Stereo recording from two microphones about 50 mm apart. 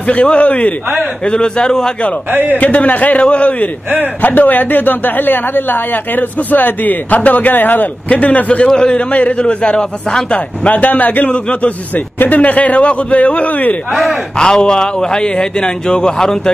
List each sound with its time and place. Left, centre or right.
0.0 s a man's voice: left
1.2 s a man's voice: centre
2.5 s a man's voice: left
8.9 s a man's voice: left
11.9 s a man's voice: left
14.4 s a man's voice: centre